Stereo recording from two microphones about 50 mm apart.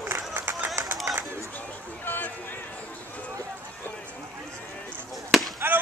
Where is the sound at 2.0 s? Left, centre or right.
Left.